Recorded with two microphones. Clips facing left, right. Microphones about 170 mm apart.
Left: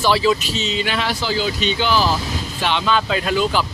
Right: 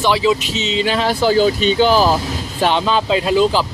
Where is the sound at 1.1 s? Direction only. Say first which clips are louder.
Right 8 dB; 50° right (ahead or behind).